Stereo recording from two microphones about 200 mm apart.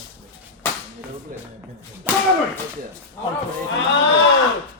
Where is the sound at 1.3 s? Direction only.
45° right (ahead or behind).